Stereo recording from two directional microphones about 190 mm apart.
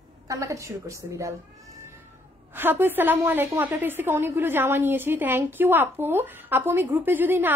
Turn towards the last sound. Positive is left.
turn(degrees=-10)  # may be behind; listen again after turning